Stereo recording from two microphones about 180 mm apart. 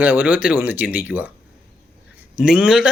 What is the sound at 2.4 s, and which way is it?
Speech, 5° right (ahead or behind).